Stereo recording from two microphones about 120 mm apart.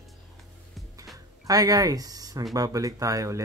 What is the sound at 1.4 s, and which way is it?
Speech, 30° right (ahead or behind).